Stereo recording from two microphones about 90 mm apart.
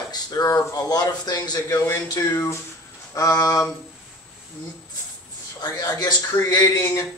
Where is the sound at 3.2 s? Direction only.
40° left (ahead or behind).